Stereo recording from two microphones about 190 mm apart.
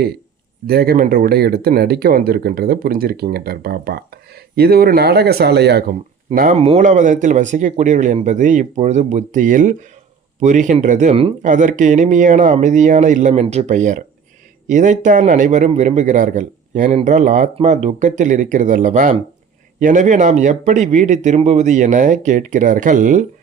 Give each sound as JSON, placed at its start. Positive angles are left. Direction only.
{"t": 0.7, "sound": "speech", "side_deg": -55}